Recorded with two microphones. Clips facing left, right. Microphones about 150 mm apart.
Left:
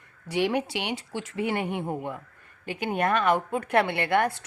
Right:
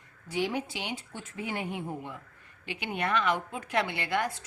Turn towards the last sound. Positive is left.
turn(degrees=65)  # may be behind; listen again after turning